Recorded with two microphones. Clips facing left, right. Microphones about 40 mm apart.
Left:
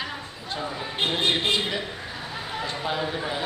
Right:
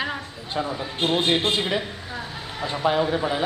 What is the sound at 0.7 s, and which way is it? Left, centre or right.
Speech, centre.